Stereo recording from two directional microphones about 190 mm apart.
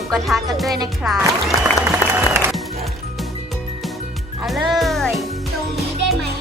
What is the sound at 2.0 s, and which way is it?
Applause, 15° left (ahead or behind).